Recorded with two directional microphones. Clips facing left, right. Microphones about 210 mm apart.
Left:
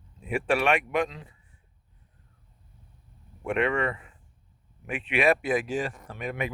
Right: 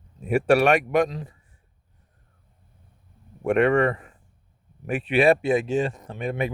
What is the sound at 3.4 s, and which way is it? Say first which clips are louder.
Speech: right 7 dB; 45° right (ahead or behind).